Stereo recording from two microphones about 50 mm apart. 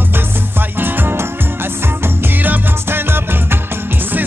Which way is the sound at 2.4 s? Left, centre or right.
Right.